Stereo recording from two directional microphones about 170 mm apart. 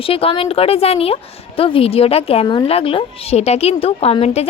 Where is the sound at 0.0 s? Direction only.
35° left (ahead or behind).